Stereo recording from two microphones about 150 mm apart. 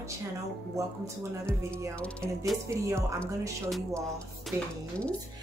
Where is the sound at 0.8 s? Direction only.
20° right (ahead or behind).